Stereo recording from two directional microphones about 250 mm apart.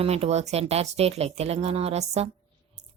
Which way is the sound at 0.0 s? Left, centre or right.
Right.